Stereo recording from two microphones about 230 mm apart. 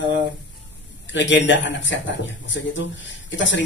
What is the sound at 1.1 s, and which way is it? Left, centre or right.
A man's voice, left.